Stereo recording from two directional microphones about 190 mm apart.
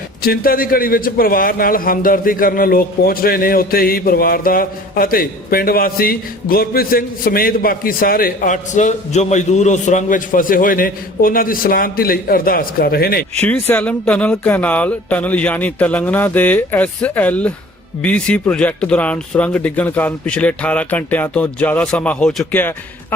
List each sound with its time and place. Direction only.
0.2 s a man's voice: 50° left (ahead or behind)
13.3 s speech: 10° left (ahead or behind)